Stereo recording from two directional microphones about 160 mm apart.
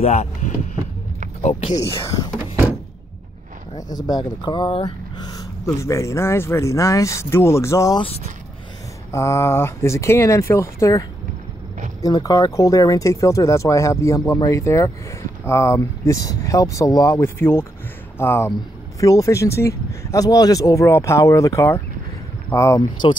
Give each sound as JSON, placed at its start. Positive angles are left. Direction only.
{"t": 0.0, "sound": "speech", "side_deg": 45}
{"t": 3.9, "sound": "speech", "side_deg": 25}
{"t": 5.4, "sound": "speech", "side_deg": 20}
{"t": 8.0, "sound": "speech", "side_deg": 40}
{"t": 9.1, "sound": "speech", "side_deg": 20}